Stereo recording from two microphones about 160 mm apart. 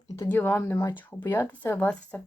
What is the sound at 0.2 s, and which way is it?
Speech, 10° left (ahead or behind).